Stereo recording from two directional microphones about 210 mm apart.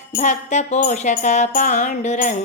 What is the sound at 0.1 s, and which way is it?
Music, 35° left (ahead or behind).